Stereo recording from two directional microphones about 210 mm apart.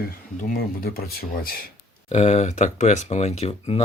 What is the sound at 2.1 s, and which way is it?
Speech, 30° left (ahead or behind).